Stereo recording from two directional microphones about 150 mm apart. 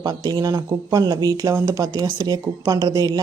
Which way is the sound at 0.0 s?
25° right (ahead or behind).